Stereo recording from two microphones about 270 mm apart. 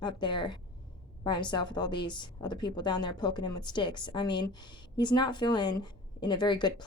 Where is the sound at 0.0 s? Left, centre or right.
Centre.